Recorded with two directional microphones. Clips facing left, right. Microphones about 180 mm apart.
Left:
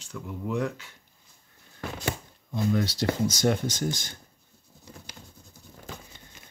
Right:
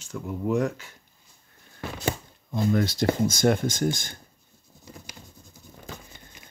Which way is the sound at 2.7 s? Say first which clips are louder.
Right 4 dB; 50° right (ahead or behind).